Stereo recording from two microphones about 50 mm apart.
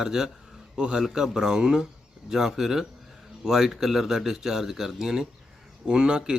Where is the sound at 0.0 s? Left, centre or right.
Centre.